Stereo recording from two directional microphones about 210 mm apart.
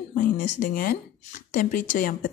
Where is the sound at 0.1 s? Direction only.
40° left (ahead or behind).